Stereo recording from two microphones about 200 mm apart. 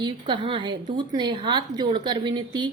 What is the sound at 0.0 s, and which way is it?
A woman's voice, 25° right (ahead or behind).